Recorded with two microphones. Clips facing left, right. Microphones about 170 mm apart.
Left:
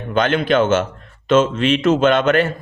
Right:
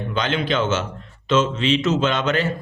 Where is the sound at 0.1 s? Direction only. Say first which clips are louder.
Left 7 dB; 55° left (ahead or behind).